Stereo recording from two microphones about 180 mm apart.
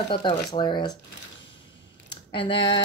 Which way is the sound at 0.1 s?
25° left (ahead or behind).